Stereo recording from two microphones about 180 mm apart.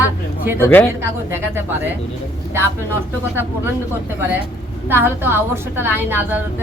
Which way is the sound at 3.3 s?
10° right (ahead or behind).